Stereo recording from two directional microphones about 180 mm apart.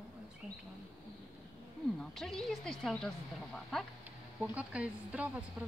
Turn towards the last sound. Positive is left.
turn(degrees=-5)  # may be behind; listen again after turning